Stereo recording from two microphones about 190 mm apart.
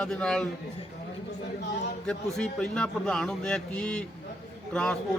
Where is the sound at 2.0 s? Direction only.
5° left (ahead or behind).